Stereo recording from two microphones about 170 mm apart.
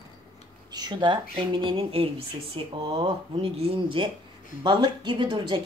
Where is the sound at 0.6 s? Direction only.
25° right (ahead or behind).